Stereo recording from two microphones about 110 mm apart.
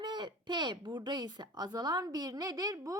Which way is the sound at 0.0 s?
40° right (ahead or behind).